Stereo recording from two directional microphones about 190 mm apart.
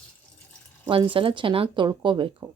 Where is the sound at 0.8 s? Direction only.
25° right (ahead or behind).